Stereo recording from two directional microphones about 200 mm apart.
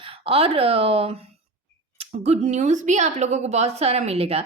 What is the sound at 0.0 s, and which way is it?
A woman's voice, 30° right (ahead or behind).